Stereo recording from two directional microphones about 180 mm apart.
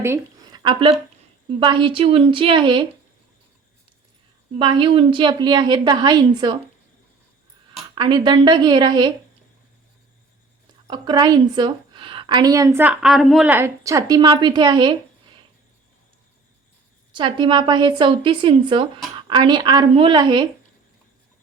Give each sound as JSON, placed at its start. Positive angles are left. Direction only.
{"t": 0.0, "sound": "a sound", "side_deg": -15}
{"t": 0.6, "sound": "a woman's voice", "side_deg": -25}
{"t": 4.5, "sound": "a woman's voice", "side_deg": -25}
{"t": 7.9, "sound": "a woman's voice", "side_deg": -25}
{"t": 10.8, "sound": "a woman's voice", "side_deg": -25}
{"t": 17.2, "sound": "a woman's voice", "side_deg": -25}